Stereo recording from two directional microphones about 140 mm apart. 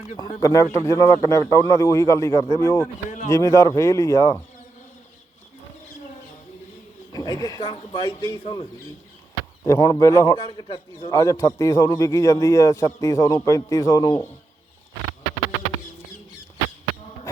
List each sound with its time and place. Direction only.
0.2 s a man's voice: 25° left (ahead or behind)
7.1 s a man's voice: 25° left (ahead or behind)
9.6 s a man's voice: 25° left (ahead or behind)
10.3 s a man's voice: 35° left (ahead or behind)
11.2 s a man's voice: 20° left (ahead or behind)